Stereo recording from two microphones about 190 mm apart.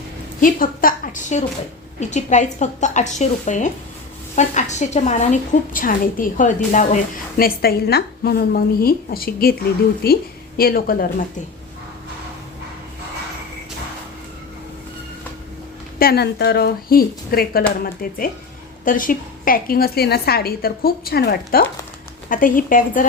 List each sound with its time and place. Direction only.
0.3 s a woman's voice: 45° left (ahead or behind)
16.0 s a woman's voice: 55° left (ahead or behind)